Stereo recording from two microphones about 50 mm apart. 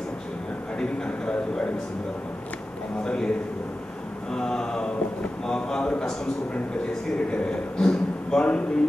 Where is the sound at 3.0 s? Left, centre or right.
Centre.